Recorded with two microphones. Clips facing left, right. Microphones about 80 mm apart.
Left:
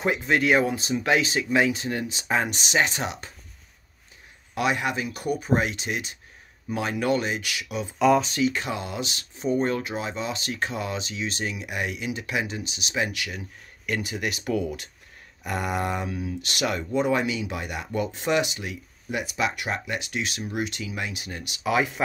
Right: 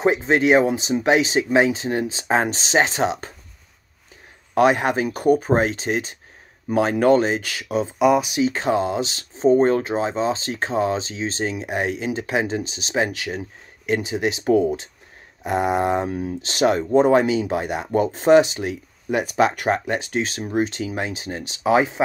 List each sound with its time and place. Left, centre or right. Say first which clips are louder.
0.0 s speech: right 5 dB; right
4.6 s speech: right 8 dB; right
8.0 s speech: right 2 dB; centre
8.4 s speech: right 6 dB; right